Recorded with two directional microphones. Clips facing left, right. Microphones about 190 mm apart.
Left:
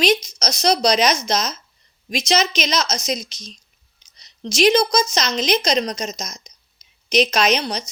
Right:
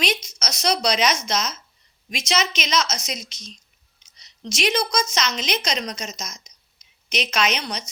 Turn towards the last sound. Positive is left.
turn(degrees=35)  # may be behind; listen again after turning